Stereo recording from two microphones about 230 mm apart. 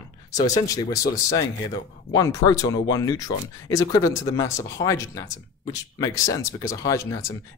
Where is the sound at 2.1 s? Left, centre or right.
Centre.